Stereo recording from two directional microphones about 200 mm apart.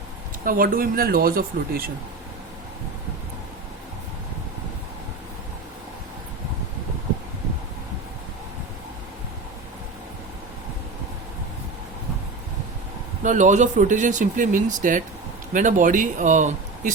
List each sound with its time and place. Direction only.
0.4 s speech: 45° right (ahead or behind)
13.2 s speech: 40° right (ahead or behind)